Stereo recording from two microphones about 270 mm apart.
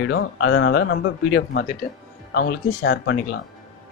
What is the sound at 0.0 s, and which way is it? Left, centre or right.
Speech, left.